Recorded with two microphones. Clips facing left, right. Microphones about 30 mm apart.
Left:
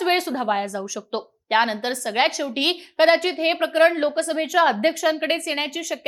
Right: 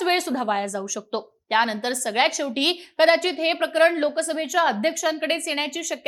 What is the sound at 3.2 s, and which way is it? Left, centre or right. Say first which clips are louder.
Speech: left 1 dB; left.